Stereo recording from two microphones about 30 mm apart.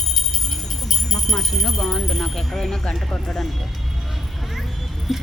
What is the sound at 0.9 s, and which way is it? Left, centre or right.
Speech, centre.